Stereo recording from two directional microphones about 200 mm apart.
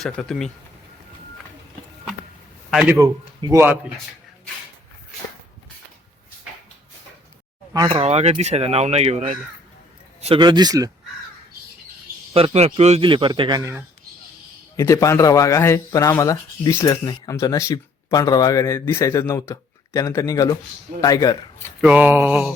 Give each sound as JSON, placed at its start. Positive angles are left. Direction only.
{"t": 0.0, "sound": "speech", "side_deg": 0}
{"t": 2.6, "sound": "a man's voice", "side_deg": -5}
{"t": 7.9, "sound": "speech", "side_deg": -30}
{"t": 10.2, "sound": "a man's voice", "side_deg": -30}
{"t": 12.3, "sound": "a man's voice", "side_deg": -30}
{"t": 14.8, "sound": "speech", "side_deg": 15}
{"t": 21.8, "sound": "a man's voice", "side_deg": -5}